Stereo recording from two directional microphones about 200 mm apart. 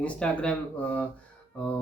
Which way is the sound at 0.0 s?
5° left (ahead or behind).